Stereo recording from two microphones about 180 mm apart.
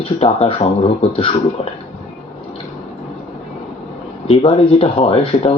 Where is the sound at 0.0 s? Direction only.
35° left (ahead or behind).